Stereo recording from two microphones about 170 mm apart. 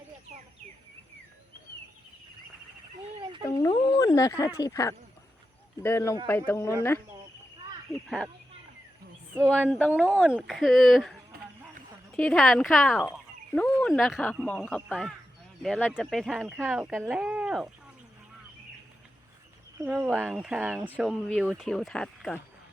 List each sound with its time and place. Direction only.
3.6 s speech: 25° left (ahead or behind)
7.9 s speech: 20° left (ahead or behind)
9.4 s speech: 5° left (ahead or behind)
9.9 s speech: 5° right (ahead or behind)
12.1 s speech: 5° left (ahead or behind)
19.8 s speech: 5° right (ahead or behind)